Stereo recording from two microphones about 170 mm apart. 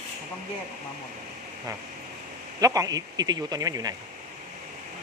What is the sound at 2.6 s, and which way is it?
Speech, 20° right (ahead or behind).